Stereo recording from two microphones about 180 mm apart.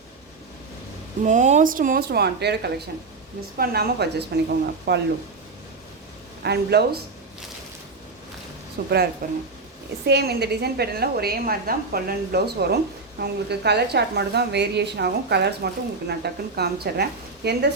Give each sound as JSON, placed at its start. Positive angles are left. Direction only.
{"t": 1.2, "sound": "a woman's voice", "side_deg": -40}
{"t": 6.4, "sound": "a woman's voice", "side_deg": -65}
{"t": 8.8, "sound": "a woman's voice", "side_deg": -60}
{"t": 10.1, "sound": "a woman's voice", "side_deg": -65}